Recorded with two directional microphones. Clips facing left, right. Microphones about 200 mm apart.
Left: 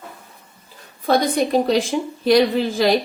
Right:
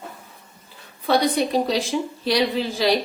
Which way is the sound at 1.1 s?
50° left (ahead or behind).